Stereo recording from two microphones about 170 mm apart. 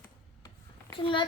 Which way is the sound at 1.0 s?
30° left (ahead or behind).